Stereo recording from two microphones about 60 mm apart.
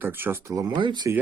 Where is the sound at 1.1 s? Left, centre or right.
Right.